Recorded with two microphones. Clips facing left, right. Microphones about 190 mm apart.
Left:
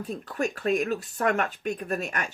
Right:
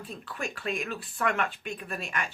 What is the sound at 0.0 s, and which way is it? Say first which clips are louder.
Speech: left 8 dB; 45° left (ahead or behind).